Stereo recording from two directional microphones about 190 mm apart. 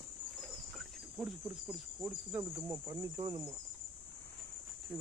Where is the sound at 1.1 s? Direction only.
5° right (ahead or behind).